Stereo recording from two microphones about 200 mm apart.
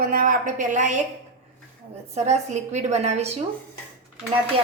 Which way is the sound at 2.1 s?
35° right (ahead or behind).